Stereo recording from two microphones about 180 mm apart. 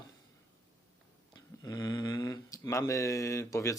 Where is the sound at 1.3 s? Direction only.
20° left (ahead or behind).